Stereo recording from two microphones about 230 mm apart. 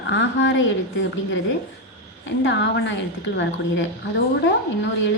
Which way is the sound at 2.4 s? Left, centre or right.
Left.